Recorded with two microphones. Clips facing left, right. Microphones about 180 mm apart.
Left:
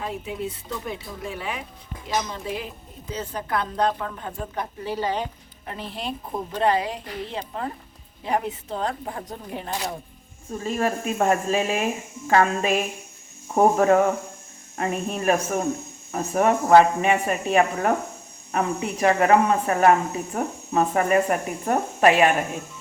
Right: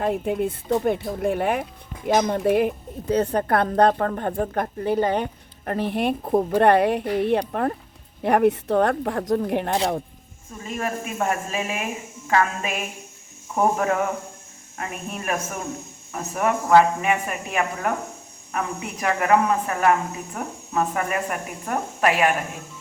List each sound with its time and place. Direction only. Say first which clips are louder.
0.0 s a woman's voice: right 7 dB; 55° right (ahead or behind); by 9.7 s 70° right (ahead or behind)
10.6 s speech: left 3 dB; 35° left (ahead or behind)